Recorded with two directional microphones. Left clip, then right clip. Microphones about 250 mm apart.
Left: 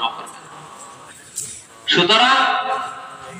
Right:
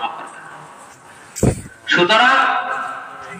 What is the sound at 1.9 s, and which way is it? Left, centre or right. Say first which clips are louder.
Speech: right 1 dB; centre.